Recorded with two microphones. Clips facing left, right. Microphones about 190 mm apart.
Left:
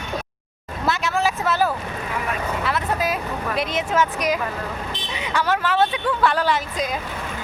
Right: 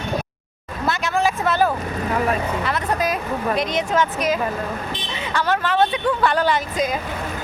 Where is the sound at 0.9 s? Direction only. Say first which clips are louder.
Right 1 dB; centre (ahead or behind).